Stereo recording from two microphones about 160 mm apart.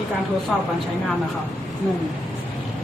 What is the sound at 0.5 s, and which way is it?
Speech, centre (ahead or behind).